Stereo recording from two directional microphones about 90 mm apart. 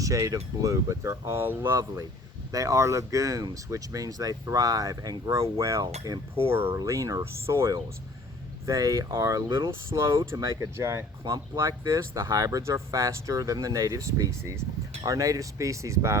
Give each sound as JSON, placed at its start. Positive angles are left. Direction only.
{"t": 0.0, "sound": "speech", "side_deg": -40}
{"t": 2.5, "sound": "speech", "side_deg": -40}
{"t": 6.5, "sound": "speech", "side_deg": -25}
{"t": 6.7, "sound": "speech", "side_deg": -35}